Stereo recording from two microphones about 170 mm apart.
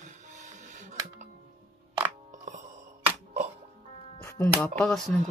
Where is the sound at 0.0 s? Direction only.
45° right (ahead or behind).